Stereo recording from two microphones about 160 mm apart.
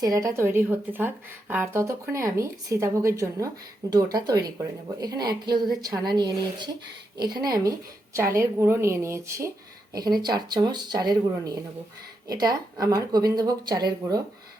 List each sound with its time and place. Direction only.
0.0 s a woman's voice: 20° right (ahead or behind)